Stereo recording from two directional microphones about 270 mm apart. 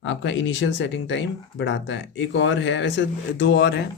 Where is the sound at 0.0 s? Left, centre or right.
Left.